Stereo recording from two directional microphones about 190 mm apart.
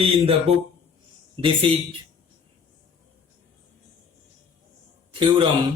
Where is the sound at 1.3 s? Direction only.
30° right (ahead or behind).